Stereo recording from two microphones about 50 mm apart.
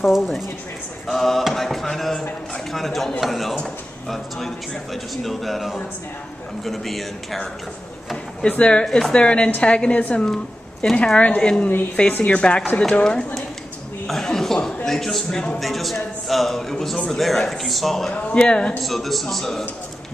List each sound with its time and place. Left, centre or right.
0.0 s a man's voice: centre
5.1 s a man's voice: centre
8.4 s a woman's voice: left
8.8 s a man's voice: centre
9.1 s a woman's voice: left
14.0 s chuckle: centre
14.9 s a man's voice: centre
18.1 s a woman's voice: left
18.9 s a man's voice: centre